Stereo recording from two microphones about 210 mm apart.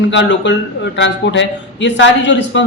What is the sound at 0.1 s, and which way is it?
A man's voice, 60° left (ahead or behind).